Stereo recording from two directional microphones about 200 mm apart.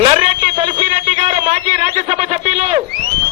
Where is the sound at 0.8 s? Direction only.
35° right (ahead or behind).